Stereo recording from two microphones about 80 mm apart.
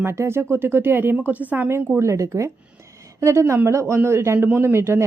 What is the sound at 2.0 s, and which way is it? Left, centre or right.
Speech, right.